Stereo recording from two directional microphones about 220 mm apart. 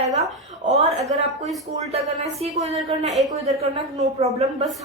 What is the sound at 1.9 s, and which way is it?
A woman's voice, 30° right (ahead or behind).